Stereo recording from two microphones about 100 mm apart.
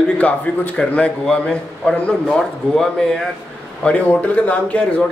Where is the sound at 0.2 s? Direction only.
15° left (ahead or behind).